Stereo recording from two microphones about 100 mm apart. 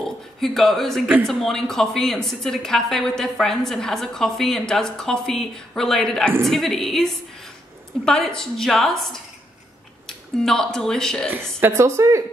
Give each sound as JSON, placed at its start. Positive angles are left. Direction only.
{"t": 0.0, "sound": "a man's voice", "side_deg": 5}
{"t": 11.6, "sound": "a woman's voice", "side_deg": -30}